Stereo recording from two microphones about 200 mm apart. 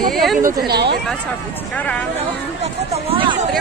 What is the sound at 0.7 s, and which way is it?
Speech, 55° right (ahead or behind).